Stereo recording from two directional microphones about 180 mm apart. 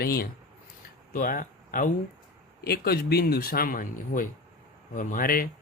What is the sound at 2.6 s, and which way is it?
Speech, 60° left (ahead or behind).